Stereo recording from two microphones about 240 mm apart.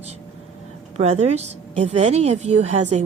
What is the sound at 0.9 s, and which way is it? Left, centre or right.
A woman's voice, right.